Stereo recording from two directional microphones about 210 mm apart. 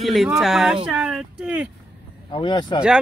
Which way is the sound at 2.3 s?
25° left (ahead or behind).